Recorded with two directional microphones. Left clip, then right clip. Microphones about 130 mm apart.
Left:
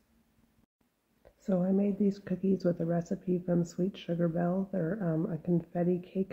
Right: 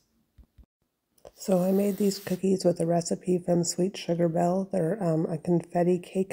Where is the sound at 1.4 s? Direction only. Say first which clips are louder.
Right 6 dB; 35° right (ahead or behind).